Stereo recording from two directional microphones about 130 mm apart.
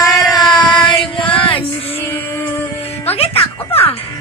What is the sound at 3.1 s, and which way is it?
Music, 50° left (ahead or behind).